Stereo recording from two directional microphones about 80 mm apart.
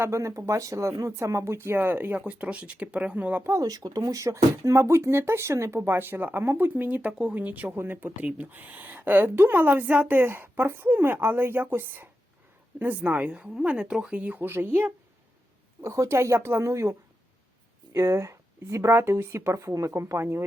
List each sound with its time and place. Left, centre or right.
0.0 s a woman's voice: right; by 3.4 s centre
3.6 s a woman's voice: right
17.9 s speech: right